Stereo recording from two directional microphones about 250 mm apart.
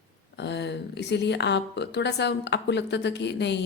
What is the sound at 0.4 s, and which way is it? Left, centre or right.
Speech, left.